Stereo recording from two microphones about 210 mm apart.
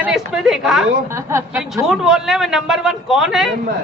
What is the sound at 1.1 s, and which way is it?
Speech, 15° right (ahead or behind).